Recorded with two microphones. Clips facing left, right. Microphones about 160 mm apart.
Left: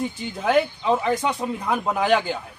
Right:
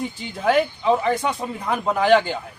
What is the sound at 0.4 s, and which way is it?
Speech, centre (ahead or behind).